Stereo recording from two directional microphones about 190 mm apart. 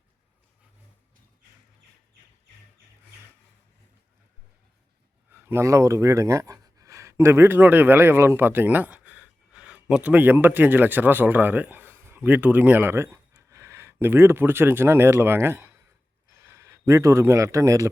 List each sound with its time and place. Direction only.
5.3 s speech: 10° right (ahead or behind)